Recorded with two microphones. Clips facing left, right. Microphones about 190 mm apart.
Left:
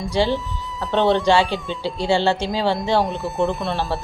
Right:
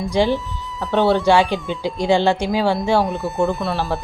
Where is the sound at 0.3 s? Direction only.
Centre (ahead or behind).